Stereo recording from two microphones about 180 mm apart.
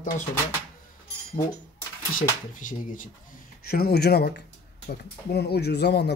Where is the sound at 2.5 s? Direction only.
45° left (ahead or behind).